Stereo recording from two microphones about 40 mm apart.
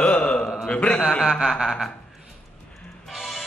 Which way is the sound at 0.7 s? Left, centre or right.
Left.